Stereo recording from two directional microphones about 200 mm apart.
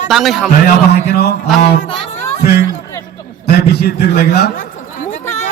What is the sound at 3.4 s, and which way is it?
A man's voice, 55° left (ahead or behind).